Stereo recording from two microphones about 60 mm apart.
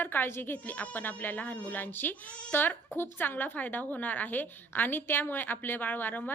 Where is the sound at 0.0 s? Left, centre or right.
Left.